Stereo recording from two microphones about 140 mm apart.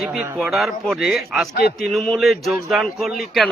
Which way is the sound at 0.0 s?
Centre (ahead or behind).